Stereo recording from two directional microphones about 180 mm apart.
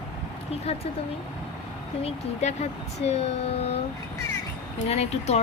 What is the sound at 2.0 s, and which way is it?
A woman's voice, 40° left (ahead or behind).